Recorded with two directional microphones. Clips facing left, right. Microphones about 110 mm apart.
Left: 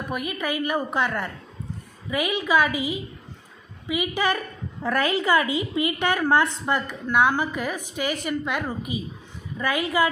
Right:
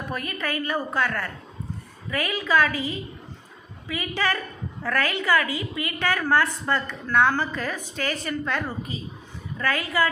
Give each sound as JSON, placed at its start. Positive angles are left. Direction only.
{"t": 0.1, "sound": "a woman's voice", "side_deg": 15}